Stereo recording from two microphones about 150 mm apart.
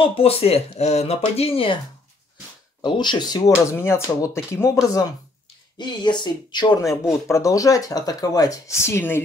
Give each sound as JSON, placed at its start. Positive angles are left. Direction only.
{"t": 0.0, "sound": "speech", "side_deg": 40}
{"t": 2.8, "sound": "speech", "side_deg": 30}
{"t": 5.8, "sound": "speech", "side_deg": 30}